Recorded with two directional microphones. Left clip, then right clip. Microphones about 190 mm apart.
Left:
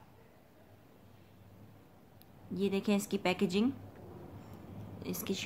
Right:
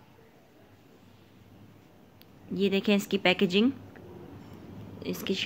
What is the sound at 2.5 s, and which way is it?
A woman's voice, 10° right (ahead or behind).